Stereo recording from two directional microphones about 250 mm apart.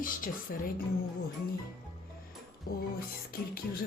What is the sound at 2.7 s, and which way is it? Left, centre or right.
Speech, left.